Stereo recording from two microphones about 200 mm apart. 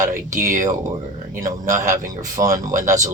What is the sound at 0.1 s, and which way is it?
A man's voice, 40° right (ahead or behind).